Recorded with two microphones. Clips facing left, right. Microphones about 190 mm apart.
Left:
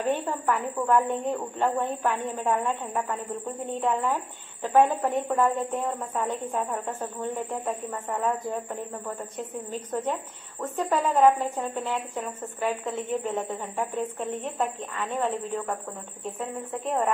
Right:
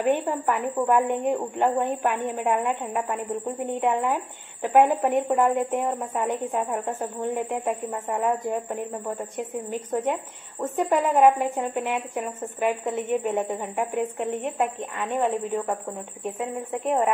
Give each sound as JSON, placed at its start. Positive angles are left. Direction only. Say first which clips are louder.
{"t": 0.0, "sound": "a woman's voice", "louder": "right 4 dB", "side_deg": -15}